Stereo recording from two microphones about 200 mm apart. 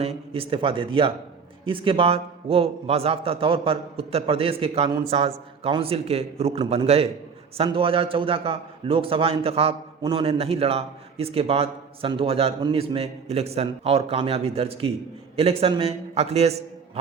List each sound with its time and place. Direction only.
0.0 s a man's voice: 30° right (ahead or behind)